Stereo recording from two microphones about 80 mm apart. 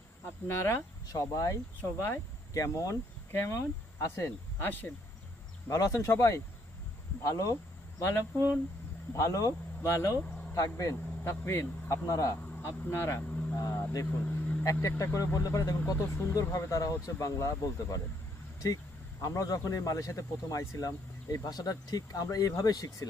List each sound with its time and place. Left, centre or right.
0.4 s speech: left
1.1 s speech: left
2.0 s speech: left
5.6 s speech: left
11.2 s speech: left
12.9 s speech: left
13.2 s vehicle: centre
13.6 s vehicle: left
14.3 s vehicle: centre
14.6 s speech: left
16.0 s speech: left
19.2 s speech: left